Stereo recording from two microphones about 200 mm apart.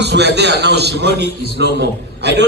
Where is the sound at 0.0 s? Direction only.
55° right (ahead or behind).